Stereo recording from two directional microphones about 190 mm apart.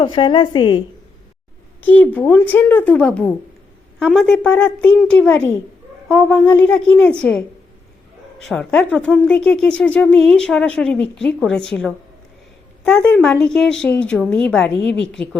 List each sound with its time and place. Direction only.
0.0 s a woman's voice: 25° left (ahead or behind)
1.8 s a woman's voice: 10° left (ahead or behind)
8.4 s a woman's voice: 5° left (ahead or behind)